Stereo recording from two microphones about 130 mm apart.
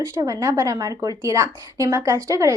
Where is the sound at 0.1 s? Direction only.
25° right (ahead or behind).